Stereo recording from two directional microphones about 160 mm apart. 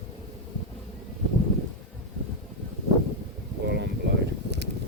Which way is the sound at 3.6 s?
90° right.